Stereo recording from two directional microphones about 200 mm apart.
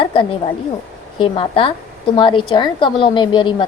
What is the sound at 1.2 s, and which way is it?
A woman's voice, 25° left (ahead or behind).